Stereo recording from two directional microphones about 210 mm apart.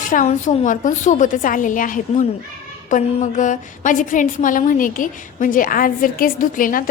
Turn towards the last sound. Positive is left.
turn(degrees=40)  # may be behind; listen again after turning